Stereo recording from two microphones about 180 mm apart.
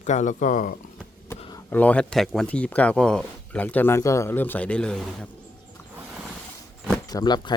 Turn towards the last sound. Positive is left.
turn(degrees=25)  # may be behind; listen again after turning